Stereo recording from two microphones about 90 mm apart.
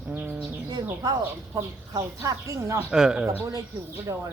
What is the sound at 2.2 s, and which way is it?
Speech, 35° right (ahead or behind).